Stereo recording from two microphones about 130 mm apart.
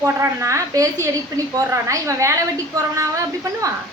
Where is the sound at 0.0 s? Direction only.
20° right (ahead or behind).